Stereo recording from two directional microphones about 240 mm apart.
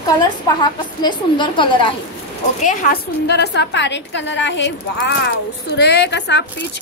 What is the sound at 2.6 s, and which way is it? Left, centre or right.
A woman's voice, left.